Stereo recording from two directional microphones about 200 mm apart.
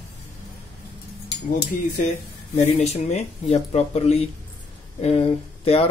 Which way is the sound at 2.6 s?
35° left (ahead or behind).